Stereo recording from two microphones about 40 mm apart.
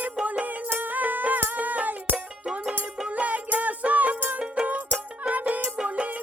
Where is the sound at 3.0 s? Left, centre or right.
Right.